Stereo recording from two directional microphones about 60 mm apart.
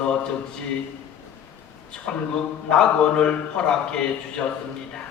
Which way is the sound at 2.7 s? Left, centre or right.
Centre.